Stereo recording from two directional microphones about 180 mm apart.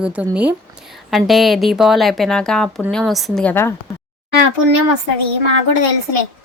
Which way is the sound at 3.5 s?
15° left (ahead or behind).